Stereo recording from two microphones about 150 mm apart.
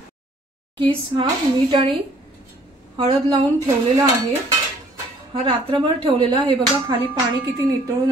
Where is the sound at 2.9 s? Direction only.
35° right (ahead or behind).